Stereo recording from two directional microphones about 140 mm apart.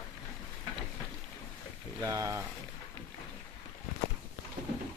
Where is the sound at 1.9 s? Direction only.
25° right (ahead or behind).